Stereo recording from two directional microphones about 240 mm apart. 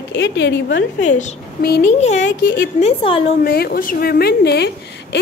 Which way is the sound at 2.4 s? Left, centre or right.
Left.